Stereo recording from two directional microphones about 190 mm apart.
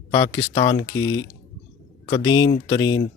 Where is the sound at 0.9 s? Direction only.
90° left.